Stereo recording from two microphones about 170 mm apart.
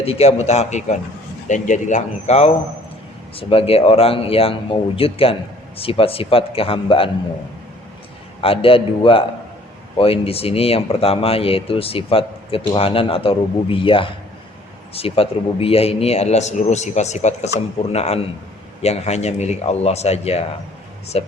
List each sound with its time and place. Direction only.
0.0 s speech: 35° left (ahead or behind)
8.4 s speech: 35° left (ahead or behind)